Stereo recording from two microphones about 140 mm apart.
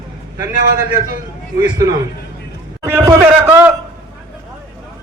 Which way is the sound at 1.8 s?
25° right (ahead or behind).